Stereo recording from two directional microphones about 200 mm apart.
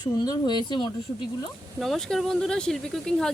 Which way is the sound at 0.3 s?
20° left (ahead or behind).